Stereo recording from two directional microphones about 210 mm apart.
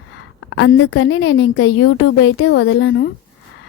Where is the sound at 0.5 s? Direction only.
70° left (ahead or behind).